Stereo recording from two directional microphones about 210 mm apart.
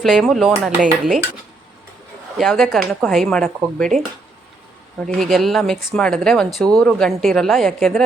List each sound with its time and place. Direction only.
0.0 s speech: centre (ahead or behind)
2.4 s speech: centre (ahead or behind)
5.1 s speech: centre (ahead or behind)